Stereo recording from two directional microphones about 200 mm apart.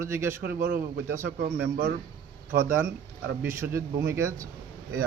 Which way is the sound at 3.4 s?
15° right (ahead or behind).